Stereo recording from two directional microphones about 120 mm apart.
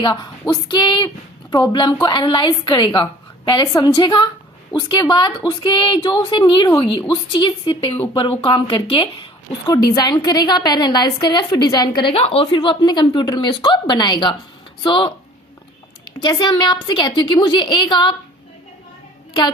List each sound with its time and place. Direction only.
0.0 s a woman's voice: 35° left (ahead or behind)
9.6 s a woman's voice: 30° left (ahead or behind)
12.1 s a woman's voice: 55° left (ahead or behind)
12.5 s a woman's voice: 40° left (ahead or behind)